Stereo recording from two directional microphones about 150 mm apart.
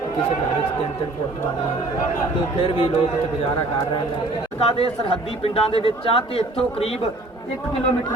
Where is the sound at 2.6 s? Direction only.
40° left (ahead or behind).